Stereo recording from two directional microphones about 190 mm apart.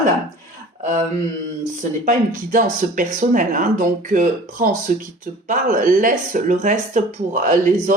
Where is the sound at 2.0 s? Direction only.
40° right (ahead or behind).